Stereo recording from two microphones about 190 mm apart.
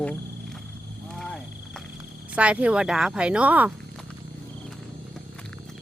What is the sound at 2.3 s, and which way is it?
Speech, 5° right (ahead or behind).